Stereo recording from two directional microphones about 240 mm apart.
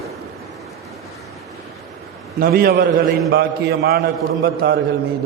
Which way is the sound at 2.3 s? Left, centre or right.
Right.